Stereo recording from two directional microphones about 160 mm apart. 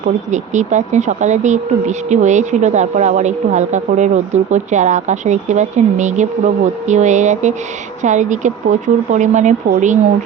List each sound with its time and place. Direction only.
0.3 s speech: 50° right (ahead or behind)